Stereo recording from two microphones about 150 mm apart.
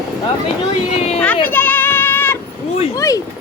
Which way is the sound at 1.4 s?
15° left (ahead or behind).